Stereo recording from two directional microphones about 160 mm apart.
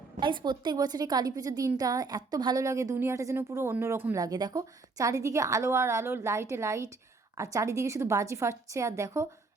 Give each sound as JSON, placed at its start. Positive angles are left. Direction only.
{"t": 0.2, "sound": "a woman's voice", "side_deg": -30}